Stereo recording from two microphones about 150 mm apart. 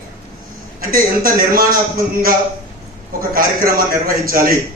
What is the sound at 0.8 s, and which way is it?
Speech, 70° right (ahead or behind).